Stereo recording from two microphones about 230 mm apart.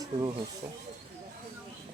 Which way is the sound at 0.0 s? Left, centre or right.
Centre.